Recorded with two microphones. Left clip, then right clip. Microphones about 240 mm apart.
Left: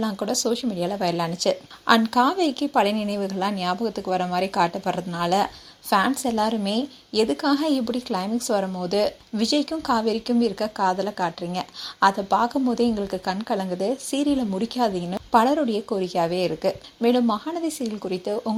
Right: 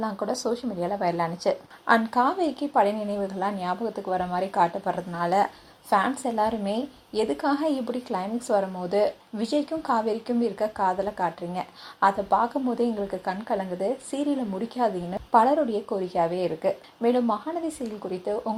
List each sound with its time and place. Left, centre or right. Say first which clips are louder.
0.0 s a woman's voice: left 3 dB; left